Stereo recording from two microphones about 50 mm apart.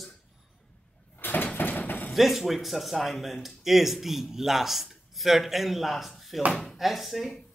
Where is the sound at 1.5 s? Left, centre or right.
Left.